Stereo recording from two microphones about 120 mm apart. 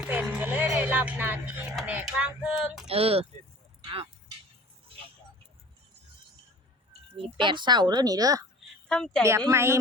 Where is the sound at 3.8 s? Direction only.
50° right (ahead or behind).